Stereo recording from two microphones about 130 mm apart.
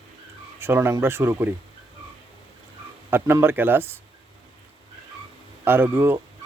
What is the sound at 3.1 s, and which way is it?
Speech, 15° right (ahead or behind).